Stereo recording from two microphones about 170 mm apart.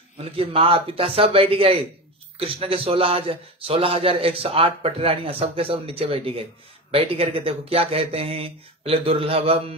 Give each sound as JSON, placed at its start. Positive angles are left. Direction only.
{"t": 0.2, "sound": "a man's voice", "side_deg": -35}